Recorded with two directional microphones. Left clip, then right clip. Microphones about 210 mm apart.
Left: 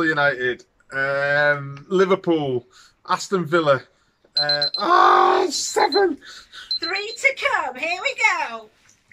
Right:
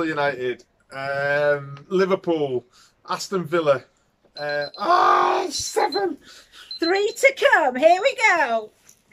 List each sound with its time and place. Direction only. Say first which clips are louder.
0.0 s speech: left 4 dB; 5° right (ahead or behind)
6.8 s speech: right 4 dB; 35° right (ahead or behind)